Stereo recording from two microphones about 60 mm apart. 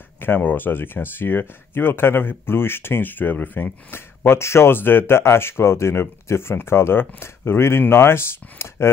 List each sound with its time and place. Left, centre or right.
0.2 s speech: left
3.9 s speech: left